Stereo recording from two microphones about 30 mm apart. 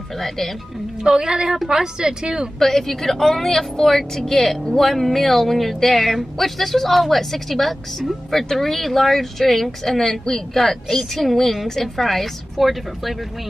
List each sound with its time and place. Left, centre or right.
1.0 s a woman's voice: right
2.6 s speech: centre